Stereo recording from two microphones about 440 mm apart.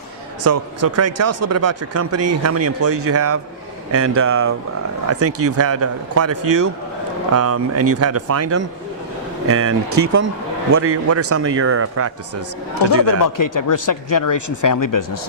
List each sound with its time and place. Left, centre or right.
0.4 s speech: right
7.3 s speech: right
12.9 s speech: left